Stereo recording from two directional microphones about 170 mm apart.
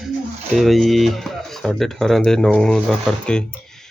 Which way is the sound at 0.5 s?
Centre (ahead or behind).